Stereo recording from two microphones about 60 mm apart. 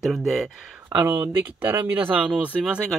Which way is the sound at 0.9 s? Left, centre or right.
Right.